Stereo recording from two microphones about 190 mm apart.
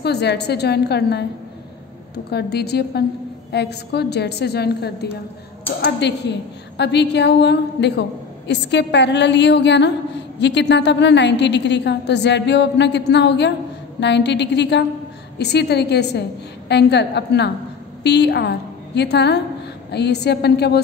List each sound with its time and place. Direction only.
0.0 s a woman's voice: 60° left (ahead or behind)